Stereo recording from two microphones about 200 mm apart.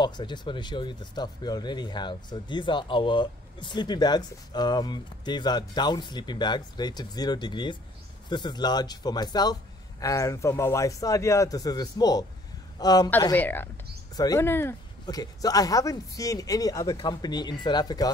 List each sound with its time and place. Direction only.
0.0 s a man's voice: 25° left (ahead or behind)